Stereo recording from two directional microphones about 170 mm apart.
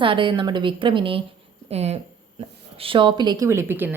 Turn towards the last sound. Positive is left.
turn(degrees=-10)  # may be behind; listen again after turning